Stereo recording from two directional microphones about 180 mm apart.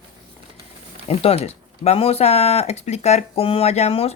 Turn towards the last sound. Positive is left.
turn(degrees=35)  # may be behind; listen again after turning